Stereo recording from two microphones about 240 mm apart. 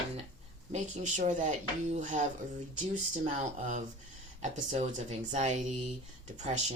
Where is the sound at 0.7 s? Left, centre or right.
Right.